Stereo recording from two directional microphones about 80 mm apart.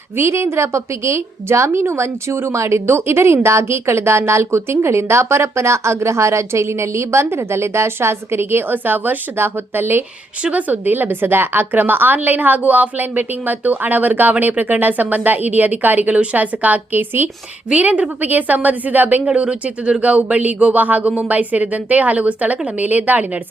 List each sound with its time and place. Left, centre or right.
0.2 s a woman's voice: right